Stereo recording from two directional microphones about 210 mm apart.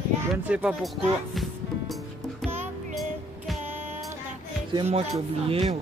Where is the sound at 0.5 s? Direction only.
5° right (ahead or behind).